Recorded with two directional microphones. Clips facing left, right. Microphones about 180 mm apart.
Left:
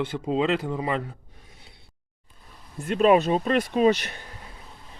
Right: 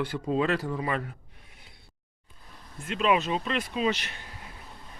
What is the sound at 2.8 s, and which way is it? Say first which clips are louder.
Speech: left 7 dB; 45° left (ahead or behind).